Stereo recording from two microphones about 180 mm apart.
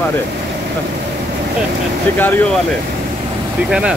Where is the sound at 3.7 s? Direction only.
5° right (ahead or behind).